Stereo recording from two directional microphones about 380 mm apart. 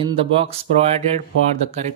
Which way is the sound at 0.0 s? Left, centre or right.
Centre.